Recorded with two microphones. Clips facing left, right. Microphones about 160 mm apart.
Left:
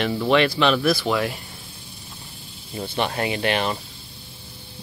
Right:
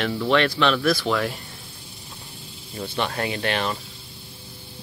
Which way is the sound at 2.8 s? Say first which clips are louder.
Left 2 dB; 20° left (ahead or behind).